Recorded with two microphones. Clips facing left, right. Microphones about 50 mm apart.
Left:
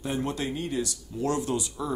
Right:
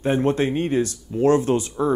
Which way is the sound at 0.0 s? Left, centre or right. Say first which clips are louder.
Right 10 dB; right.